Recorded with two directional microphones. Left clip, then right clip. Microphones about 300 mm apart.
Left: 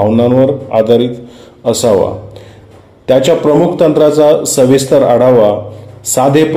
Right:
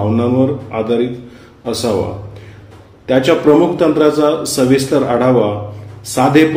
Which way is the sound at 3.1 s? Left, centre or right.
Left.